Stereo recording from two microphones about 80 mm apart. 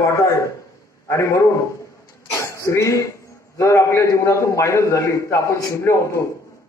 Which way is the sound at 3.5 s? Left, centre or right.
Left.